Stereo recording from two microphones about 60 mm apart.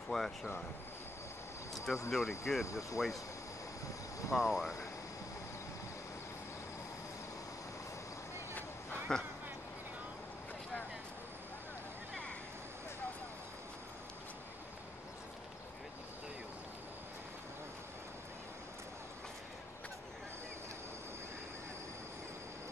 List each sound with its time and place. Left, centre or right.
0.1 s speech: centre
2.0 s speech: centre
2.6 s speech: left
4.3 s speech: centre
9.1 s speech: centre
12.1 s a sound: centre